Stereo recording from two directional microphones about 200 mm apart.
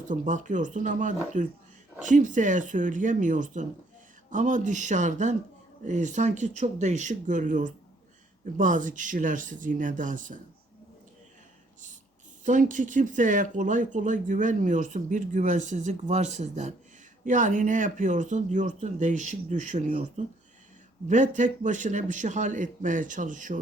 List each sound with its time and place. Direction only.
0.0 s speech: 40° right (ahead or behind)
12.5 s speech: 40° right (ahead or behind)